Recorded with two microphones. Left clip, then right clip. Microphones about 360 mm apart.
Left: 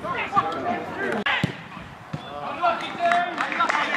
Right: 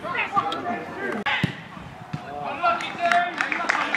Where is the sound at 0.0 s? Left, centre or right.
Centre.